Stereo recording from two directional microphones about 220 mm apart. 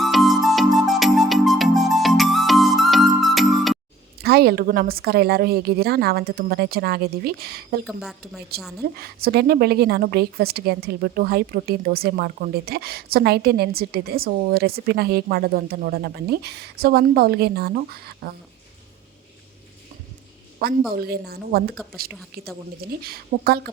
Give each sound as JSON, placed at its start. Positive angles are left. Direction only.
{"t": 0.0, "sound": "music", "side_deg": 0}
{"t": 4.2, "sound": "a woman's voice", "side_deg": -45}
{"t": 7.9, "sound": "a woman's voice", "side_deg": 0}
{"t": 9.0, "sound": "a woman's voice", "side_deg": -45}
{"t": 20.9, "sound": "a woman's voice", "side_deg": -45}
{"t": 22.1, "sound": "a woman's voice", "side_deg": 0}
{"t": 23.0, "sound": "a woman's voice", "side_deg": -45}